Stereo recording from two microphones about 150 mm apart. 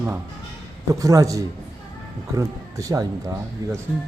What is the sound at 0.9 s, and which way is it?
Speech, 20° right (ahead or behind).